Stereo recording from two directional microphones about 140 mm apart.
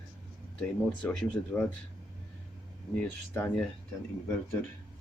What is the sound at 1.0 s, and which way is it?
Speech, 10° left (ahead or behind).